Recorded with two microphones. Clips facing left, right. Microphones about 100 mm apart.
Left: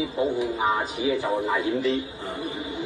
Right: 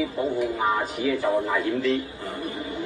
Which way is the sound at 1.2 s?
20° left (ahead or behind).